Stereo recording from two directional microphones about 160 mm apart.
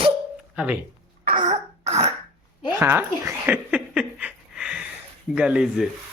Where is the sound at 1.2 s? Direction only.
55° right (ahead or behind).